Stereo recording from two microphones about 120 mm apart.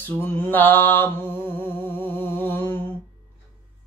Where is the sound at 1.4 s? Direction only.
20° left (ahead or behind).